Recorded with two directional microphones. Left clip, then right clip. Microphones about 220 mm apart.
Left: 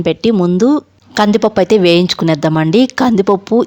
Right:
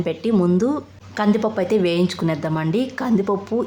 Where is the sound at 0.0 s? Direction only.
40° left (ahead or behind).